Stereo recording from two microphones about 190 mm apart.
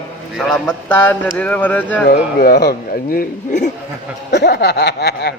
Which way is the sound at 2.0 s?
50° left (ahead or behind).